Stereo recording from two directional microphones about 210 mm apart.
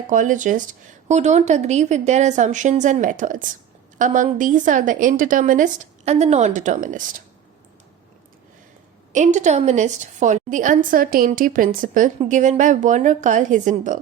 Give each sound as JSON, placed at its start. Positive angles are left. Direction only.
{"t": 0.1, "sound": "speech", "side_deg": -35}
{"t": 9.1, "sound": "speech", "side_deg": -35}